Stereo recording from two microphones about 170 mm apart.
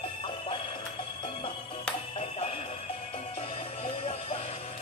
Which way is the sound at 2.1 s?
35° left (ahead or behind).